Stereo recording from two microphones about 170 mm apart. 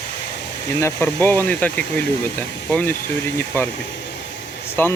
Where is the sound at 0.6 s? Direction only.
15° left (ahead or behind).